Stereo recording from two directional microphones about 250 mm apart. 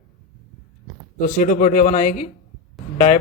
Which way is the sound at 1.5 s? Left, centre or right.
Left.